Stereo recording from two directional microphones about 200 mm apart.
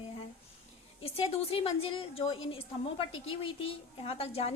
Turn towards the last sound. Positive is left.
turn(degrees=30)  # may be behind; listen again after turning